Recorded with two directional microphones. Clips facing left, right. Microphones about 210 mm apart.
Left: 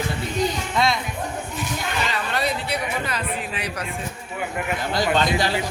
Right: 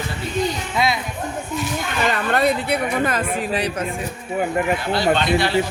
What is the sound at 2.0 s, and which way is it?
Speech, 55° right (ahead or behind).